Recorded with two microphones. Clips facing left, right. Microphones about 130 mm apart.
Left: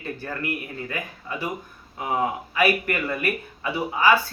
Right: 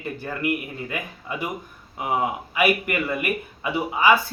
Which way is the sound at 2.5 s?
15° right (ahead or behind).